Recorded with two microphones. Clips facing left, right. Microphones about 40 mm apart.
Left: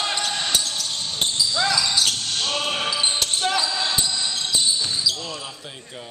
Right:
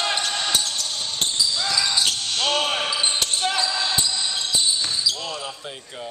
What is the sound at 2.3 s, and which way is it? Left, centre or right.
Basketball bounce, right.